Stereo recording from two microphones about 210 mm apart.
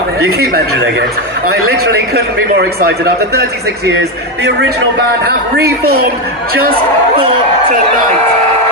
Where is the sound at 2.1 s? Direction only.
50° right (ahead or behind).